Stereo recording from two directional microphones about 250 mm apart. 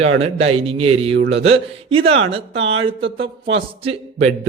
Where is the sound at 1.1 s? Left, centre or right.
Right.